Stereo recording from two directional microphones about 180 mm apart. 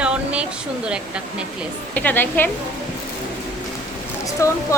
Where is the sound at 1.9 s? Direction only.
10° left (ahead or behind).